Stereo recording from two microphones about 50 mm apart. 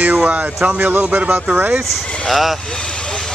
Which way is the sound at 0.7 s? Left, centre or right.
Right.